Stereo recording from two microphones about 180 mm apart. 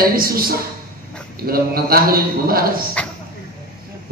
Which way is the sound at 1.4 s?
55° right (ahead or behind).